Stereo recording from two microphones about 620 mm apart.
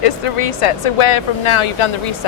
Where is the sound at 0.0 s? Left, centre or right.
Left.